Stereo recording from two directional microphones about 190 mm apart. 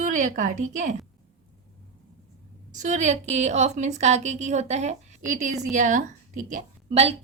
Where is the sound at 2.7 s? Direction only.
40° right (ahead or behind).